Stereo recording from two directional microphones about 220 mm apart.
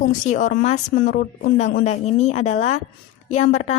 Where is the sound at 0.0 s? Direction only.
35° left (ahead or behind).